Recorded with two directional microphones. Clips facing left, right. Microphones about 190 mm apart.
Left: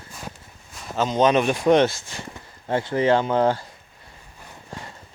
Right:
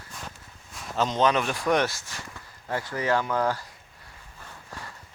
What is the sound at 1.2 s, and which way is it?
Speech, 20° left (ahead or behind).